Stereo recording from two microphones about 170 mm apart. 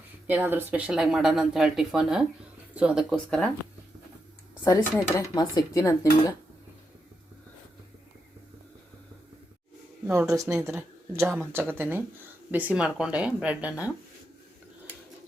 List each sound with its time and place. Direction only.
0.3 s speech: 10° right (ahead or behind); by 3.5 s 5° left (ahead or behind)
5.1 s speech: 25° left (ahead or behind)
10.1 s speech: 15° right (ahead or behind)